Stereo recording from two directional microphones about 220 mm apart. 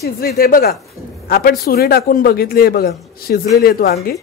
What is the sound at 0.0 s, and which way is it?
Speech, 45° left (ahead or behind).